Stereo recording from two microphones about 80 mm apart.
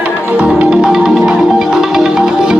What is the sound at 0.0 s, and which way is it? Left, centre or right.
Music, centre.